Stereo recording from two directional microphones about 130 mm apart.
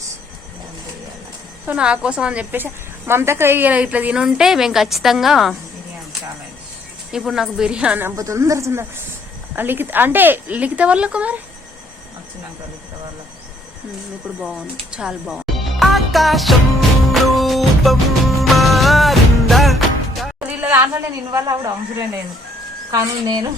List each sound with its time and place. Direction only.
1.6 s a woman's voice: 10° right (ahead or behind)
7.1 s a woman's voice: centre (ahead or behind)
8.1 s speech: 25° right (ahead or behind); by 11.3 s 10° right (ahead or behind)
14.4 s speech: 5° right (ahead or behind)
17.3 s music: centre (ahead or behind)
20.6 s a sound: 15° right (ahead or behind)
21.3 s speech: 25° right (ahead or behind)